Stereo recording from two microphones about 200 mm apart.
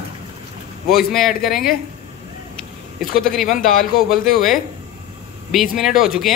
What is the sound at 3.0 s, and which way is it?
Speech, centre (ahead or behind).